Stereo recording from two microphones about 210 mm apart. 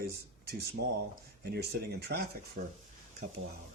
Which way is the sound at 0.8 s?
50° right (ahead or behind).